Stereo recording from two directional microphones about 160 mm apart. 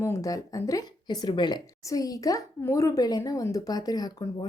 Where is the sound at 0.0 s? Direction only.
20° left (ahead or behind).